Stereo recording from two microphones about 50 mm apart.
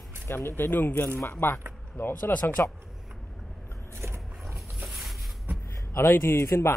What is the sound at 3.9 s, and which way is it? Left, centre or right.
Vehicle, right.